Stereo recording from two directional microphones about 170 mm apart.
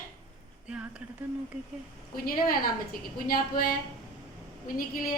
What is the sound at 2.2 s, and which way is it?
A woman's voice, 60° left (ahead or behind).